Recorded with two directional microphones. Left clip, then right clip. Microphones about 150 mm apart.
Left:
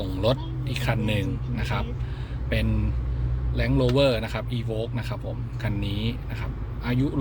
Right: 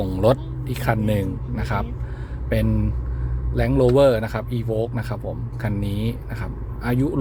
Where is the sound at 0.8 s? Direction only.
45° right (ahead or behind).